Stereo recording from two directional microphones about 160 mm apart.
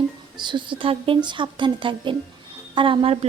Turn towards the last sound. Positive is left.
turn(degrees=-40)  # may be behind; listen again after turning